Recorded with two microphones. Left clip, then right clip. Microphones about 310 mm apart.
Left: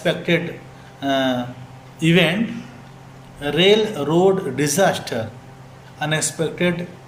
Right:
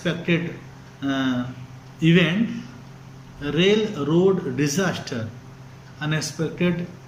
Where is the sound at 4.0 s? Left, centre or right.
Left.